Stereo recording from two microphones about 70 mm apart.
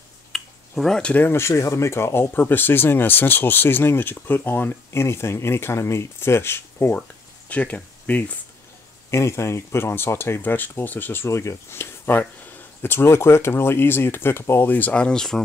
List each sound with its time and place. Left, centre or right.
0.3 s a sound: centre
1.1 s speech: left
1.5 s speech: left
6.9 s speech: centre
9.1 s speech: left
11.2 s speech: left
14.7 s speech: left